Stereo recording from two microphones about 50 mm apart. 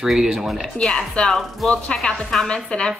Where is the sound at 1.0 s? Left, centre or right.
Centre.